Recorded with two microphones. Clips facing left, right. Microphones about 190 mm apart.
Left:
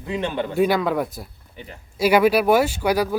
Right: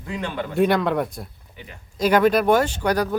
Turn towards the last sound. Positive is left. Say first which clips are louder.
# left 1 dB
turn(degrees=10)  # may be behind; listen again after turning